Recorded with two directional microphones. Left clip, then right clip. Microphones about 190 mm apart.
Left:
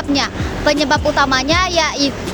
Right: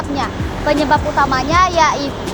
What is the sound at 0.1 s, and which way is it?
Speech, 65° left (ahead or behind).